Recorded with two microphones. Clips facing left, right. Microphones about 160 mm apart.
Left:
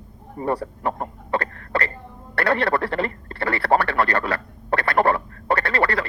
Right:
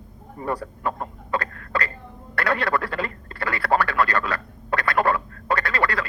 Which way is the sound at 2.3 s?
30° left (ahead or behind).